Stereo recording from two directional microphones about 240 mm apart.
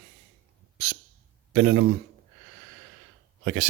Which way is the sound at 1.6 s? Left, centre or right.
Right.